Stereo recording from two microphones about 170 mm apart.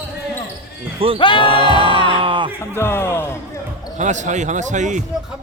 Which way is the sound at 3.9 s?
45° right (ahead or behind).